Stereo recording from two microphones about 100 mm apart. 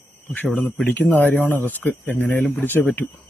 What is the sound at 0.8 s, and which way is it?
Speech, 20° left (ahead or behind).